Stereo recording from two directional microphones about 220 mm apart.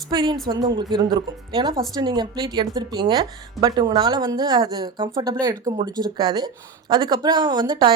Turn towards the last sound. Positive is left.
turn(degrees=-20)  # may be behind; listen again after turning